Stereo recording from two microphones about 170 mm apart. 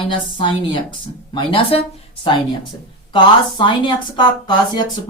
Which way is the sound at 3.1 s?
25° left (ahead or behind).